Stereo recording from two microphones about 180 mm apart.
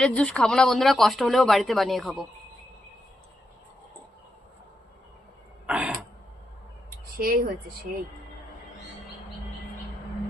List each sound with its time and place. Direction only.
0.0 s speech: 5° left (ahead or behind)
5.6 s a sound: 5° right (ahead or behind)
7.2 s speech: 50° right (ahead or behind)